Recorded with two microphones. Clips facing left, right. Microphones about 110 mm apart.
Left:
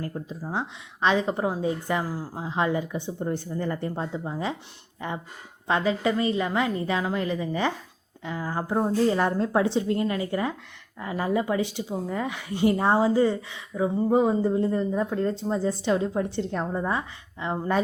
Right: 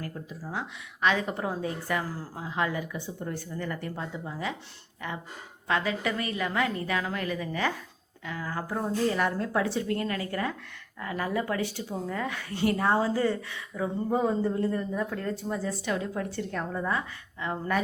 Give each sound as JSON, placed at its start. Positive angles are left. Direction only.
{"t": 0.3, "sound": "a woman's voice", "side_deg": 30}